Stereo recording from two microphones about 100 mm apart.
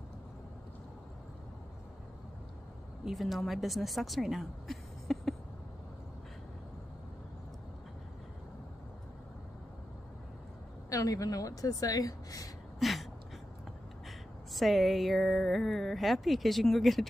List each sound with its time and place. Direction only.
3.1 s a woman's voice: centre (ahead or behind)
10.9 s a woman's voice: 35° left (ahead or behind)
12.7 s a sound: centre (ahead or behind)
14.5 s speech: centre (ahead or behind)